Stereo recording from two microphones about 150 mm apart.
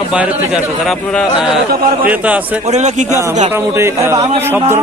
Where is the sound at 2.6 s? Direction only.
50° right (ahead or behind).